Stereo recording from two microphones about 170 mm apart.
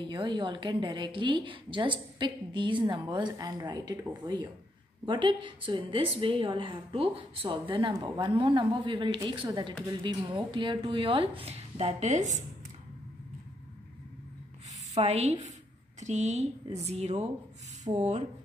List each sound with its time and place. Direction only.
0.0 s a woman's voice: 25° right (ahead or behind); by 12.4 s 45° right (ahead or behind)
15.0 s speech: 35° right (ahead or behind)